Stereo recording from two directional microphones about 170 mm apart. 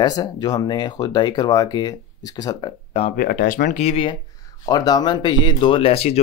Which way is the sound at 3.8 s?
35° left (ahead or behind).